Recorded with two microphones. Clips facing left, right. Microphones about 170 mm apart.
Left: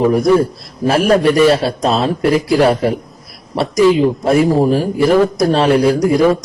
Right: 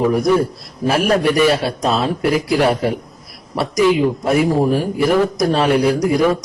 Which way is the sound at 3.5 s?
30° left (ahead or behind).